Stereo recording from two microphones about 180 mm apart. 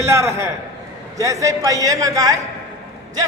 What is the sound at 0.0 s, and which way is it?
A man's voice, 15° right (ahead or behind).